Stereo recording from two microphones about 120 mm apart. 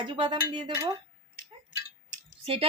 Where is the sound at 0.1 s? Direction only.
45° right (ahead or behind).